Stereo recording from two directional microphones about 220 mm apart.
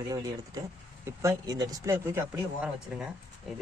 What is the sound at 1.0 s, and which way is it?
Speech, 15° right (ahead or behind).